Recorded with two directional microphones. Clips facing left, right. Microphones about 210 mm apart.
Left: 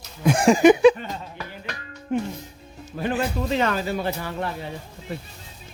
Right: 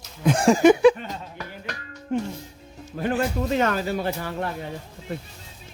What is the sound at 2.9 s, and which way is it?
Speech, 50° right (ahead or behind).